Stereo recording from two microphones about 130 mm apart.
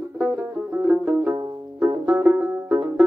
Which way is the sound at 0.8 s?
10° right (ahead or behind).